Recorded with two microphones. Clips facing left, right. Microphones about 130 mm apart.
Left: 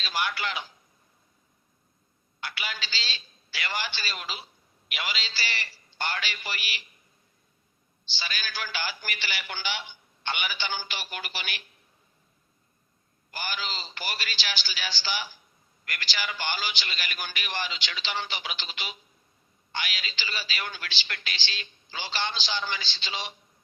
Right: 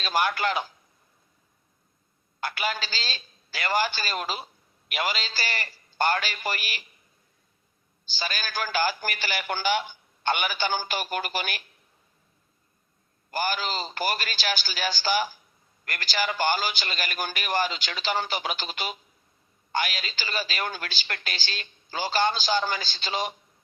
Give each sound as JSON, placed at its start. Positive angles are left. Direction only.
{"t": 0.0, "sound": "a woman's voice", "side_deg": -50}
{"t": 2.4, "sound": "a woman's voice", "side_deg": -45}
{"t": 8.1, "sound": "a woman's voice", "side_deg": -45}
{"t": 13.3, "sound": "a woman's voice", "side_deg": -45}